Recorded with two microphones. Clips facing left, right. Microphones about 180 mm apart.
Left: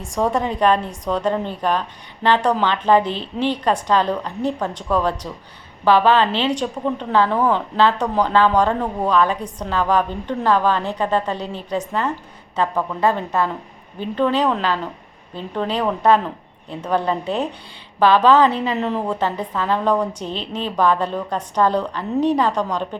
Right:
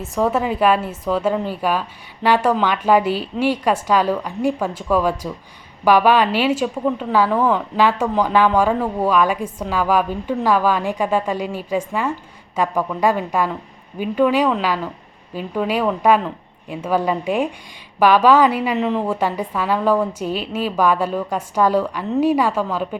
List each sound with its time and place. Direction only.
0.0 s a woman's voice: 5° right (ahead or behind)
18.8 s a woman's voice: centre (ahead or behind)